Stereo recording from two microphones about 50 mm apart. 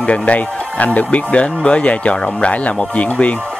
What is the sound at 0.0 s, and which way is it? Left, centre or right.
Speech, left.